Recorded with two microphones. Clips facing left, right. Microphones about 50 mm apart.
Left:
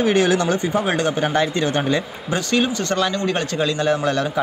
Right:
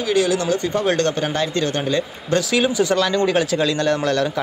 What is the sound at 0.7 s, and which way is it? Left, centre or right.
A man's voice, centre.